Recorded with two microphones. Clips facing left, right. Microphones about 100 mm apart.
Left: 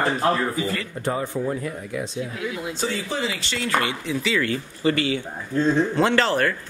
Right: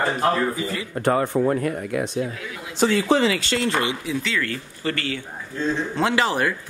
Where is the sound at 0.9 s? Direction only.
65° right (ahead or behind).